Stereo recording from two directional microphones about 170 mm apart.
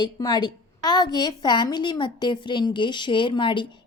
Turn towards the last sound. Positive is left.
turn(degrees=30)  # may be behind; listen again after turning